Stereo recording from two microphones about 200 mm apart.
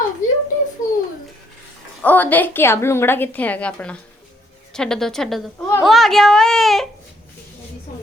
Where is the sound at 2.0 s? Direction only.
10° left (ahead or behind).